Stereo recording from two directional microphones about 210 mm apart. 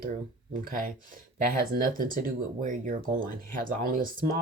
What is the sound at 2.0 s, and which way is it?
Speech, 40° right (ahead or behind).